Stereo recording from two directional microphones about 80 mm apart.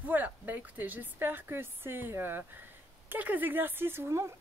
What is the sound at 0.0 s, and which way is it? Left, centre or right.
A woman's voice, right.